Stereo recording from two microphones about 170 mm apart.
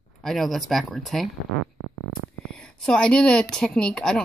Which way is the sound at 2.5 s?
5° left (ahead or behind).